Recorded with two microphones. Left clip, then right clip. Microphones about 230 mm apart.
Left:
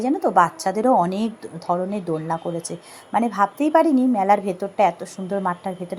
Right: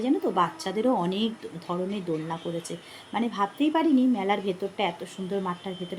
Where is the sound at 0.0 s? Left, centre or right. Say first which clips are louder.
Left 7 dB; left.